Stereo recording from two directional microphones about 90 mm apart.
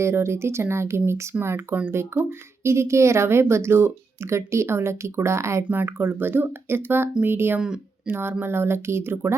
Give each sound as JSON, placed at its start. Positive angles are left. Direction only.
{"t": 0.0, "sound": "speech", "side_deg": -30}